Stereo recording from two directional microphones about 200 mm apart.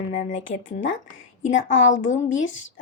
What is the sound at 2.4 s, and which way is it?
Speech, 70° left (ahead or behind).